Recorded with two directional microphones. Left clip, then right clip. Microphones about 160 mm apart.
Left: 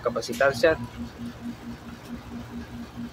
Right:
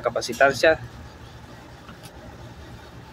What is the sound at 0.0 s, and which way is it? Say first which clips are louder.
Speech: right 4 dB; 10° right (ahead or behind).